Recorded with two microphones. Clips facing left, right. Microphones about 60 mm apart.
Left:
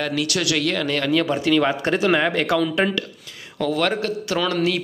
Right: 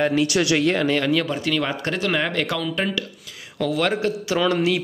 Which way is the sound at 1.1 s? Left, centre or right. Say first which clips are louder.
Left 3 dB; centre.